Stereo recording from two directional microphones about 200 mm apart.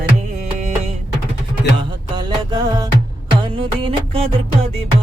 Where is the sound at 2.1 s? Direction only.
20° right (ahead or behind).